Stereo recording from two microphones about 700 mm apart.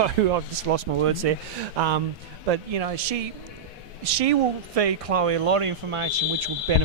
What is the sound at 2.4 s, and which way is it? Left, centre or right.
Speech, right.